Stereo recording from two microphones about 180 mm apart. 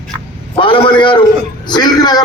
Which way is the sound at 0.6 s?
30° left (ahead or behind).